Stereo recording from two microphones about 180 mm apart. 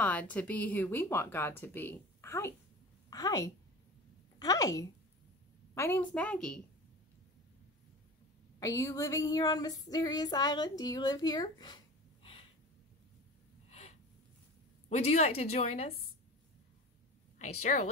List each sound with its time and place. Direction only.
0.0 s a woman's voice: 10° left (ahead or behind)
4.4 s female singing: 20° left (ahead or behind)
5.8 s speech: 10° left (ahead or behind)
8.5 s female singing: 15° left (ahead or behind)
13.7 s gasp: 35° left (ahead or behind)
14.9 s a woman's voice: 40° left (ahead or behind)
17.4 s a woman's voice: 40° left (ahead or behind)